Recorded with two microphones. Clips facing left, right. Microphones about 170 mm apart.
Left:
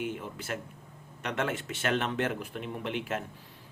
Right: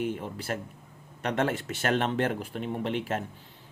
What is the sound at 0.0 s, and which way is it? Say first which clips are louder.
Speech: right 4 dB; 35° right (ahead or behind).